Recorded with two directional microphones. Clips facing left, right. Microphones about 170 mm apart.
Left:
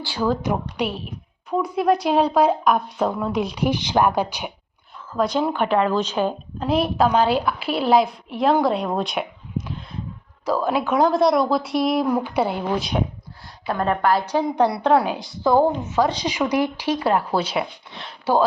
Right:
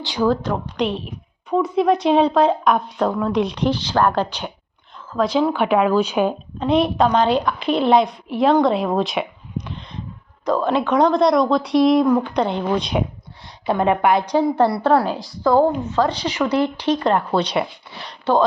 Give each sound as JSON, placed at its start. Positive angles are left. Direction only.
{"t": 0.0, "sound": "speech", "side_deg": -15}
{"t": 0.3, "sound": "a woman's voice", "side_deg": 10}
{"t": 6.6, "sound": "a woman's voice", "side_deg": 5}